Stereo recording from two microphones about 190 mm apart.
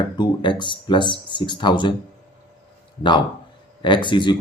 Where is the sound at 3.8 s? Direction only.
25° left (ahead or behind).